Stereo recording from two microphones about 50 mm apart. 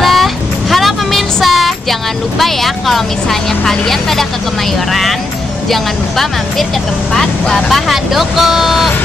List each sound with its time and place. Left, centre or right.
0.0 s a sound: centre
7.2 s speech: centre
7.9 s speech: centre